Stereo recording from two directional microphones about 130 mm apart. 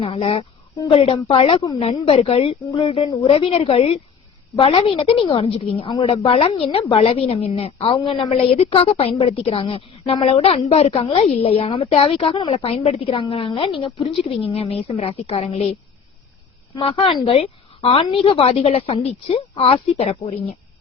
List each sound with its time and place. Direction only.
0.0 s a woman's voice: 45° left (ahead or behind)
12.1 s a woman's voice: 40° left (ahead or behind)
16.7 s a woman's voice: 45° left (ahead or behind)